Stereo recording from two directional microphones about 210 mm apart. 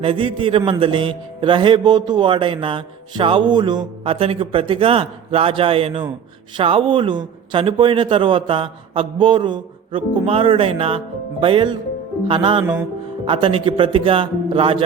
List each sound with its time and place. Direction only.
0.0 s a man's voice: 25° right (ahead or behind)